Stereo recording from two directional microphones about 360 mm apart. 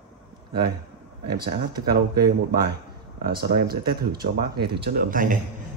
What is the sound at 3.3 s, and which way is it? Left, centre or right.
Speech, right.